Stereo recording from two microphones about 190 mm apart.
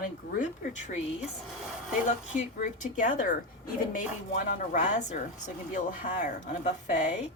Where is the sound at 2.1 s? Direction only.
40° left (ahead or behind).